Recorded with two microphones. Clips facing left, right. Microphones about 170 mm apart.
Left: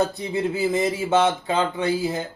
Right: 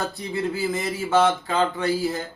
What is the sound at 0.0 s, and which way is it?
Speech, 20° left (ahead or behind).